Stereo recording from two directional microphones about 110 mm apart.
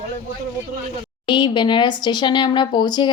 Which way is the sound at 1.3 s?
45° left (ahead or behind).